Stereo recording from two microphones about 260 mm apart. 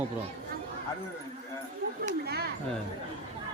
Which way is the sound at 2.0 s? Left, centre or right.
Right.